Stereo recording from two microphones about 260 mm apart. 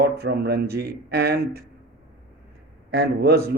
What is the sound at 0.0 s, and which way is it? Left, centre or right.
Speech, right.